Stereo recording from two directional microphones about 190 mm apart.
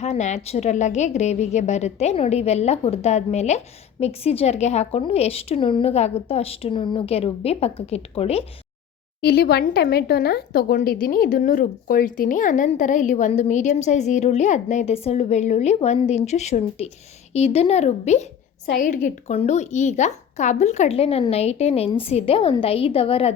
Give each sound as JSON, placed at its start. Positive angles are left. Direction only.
{"t": 0.0, "sound": "speech", "side_deg": 35}
{"t": 9.2, "sound": "speech", "side_deg": 55}